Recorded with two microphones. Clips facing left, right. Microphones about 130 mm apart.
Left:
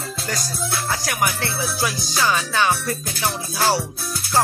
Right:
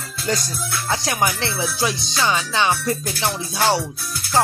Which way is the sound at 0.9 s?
25° right (ahead or behind).